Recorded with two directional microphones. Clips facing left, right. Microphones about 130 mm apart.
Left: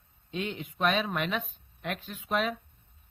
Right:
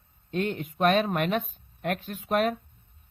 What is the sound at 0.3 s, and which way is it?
Speech, 50° right (ahead or behind).